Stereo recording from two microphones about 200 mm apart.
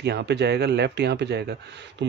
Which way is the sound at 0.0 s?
60° right (ahead or behind).